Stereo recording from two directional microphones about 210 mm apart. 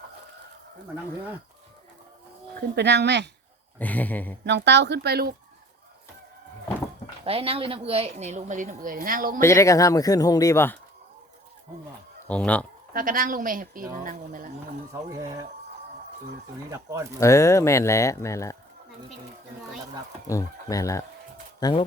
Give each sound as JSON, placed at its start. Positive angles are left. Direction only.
{"t": 2.6, "sound": "speech", "side_deg": -55}
{"t": 3.8, "sound": "speech", "side_deg": 5}
{"t": 4.4, "sound": "speech", "side_deg": -55}
{"t": 7.3, "sound": "a woman's voice", "side_deg": -25}
{"t": 9.4, "sound": "speech", "side_deg": 15}
{"t": 12.3, "sound": "speech", "side_deg": 5}
{"t": 12.9, "sound": "a woman's voice", "side_deg": -40}
{"t": 15.1, "sound": "speech", "side_deg": -15}
{"t": 16.6, "sound": "speech", "side_deg": -15}
{"t": 17.2, "sound": "speech", "side_deg": 15}
{"t": 20.2, "sound": "speech", "side_deg": 15}